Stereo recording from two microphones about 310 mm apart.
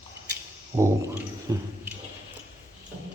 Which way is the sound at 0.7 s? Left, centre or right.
Centre.